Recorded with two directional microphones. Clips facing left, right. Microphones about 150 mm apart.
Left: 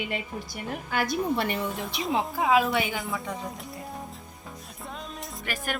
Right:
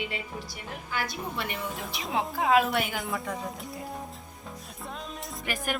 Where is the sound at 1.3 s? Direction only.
40° left (ahead or behind).